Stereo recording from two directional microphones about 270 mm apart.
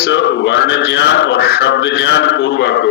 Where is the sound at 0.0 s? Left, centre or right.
Left.